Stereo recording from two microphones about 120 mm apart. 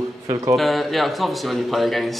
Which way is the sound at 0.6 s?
Centre (ahead or behind).